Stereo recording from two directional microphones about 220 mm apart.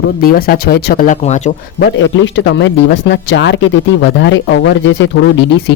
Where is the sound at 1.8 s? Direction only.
55° left (ahead or behind).